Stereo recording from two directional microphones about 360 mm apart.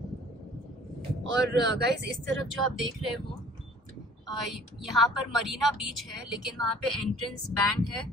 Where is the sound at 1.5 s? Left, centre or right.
Right.